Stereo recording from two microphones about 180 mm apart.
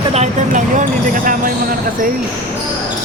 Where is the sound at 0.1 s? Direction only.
40° right (ahead or behind).